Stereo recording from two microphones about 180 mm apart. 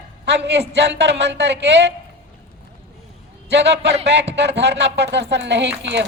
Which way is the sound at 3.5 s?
70° right (ahead or behind).